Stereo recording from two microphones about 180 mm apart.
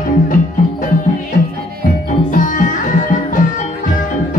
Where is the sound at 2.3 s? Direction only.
45° left (ahead or behind).